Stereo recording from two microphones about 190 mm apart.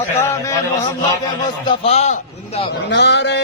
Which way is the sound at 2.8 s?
65° left (ahead or behind).